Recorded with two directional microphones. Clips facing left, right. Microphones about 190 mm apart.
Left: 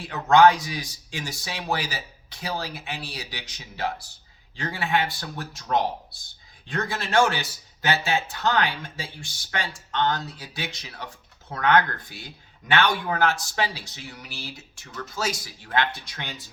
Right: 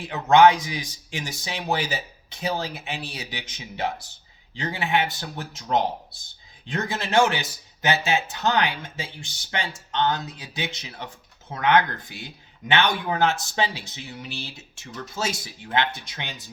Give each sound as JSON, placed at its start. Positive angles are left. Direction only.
{"t": 0.0, "sound": "speech", "side_deg": -20}